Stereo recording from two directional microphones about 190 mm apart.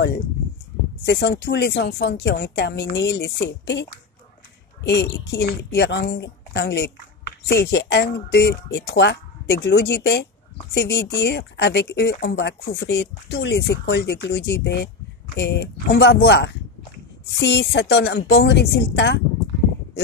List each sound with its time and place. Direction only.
1.0 s a woman's voice: 60° left (ahead or behind)